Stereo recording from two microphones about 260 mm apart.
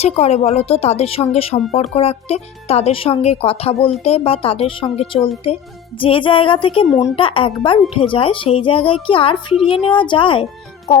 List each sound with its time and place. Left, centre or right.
0.0 s a woman's voice: left